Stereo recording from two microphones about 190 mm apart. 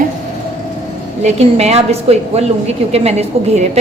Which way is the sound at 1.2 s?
35° right (ahead or behind).